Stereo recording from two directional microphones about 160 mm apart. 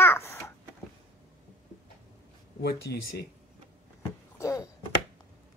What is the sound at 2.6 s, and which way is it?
Speech, 90° left.